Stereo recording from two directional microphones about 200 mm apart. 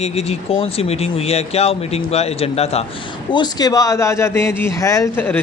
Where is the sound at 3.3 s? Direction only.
20° left (ahead or behind).